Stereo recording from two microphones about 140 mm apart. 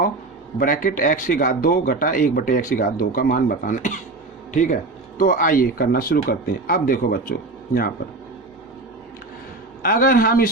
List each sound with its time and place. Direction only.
0.6 s speech: 75° left (ahead or behind)
4.5 s speech: 65° left (ahead or behind); by 7.9 s 90° left
9.8 s speech: 90° left